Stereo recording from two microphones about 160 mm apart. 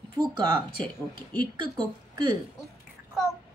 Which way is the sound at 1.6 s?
30° right (ahead or behind).